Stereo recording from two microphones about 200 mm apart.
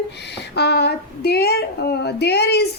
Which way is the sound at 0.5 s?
55° left (ahead or behind).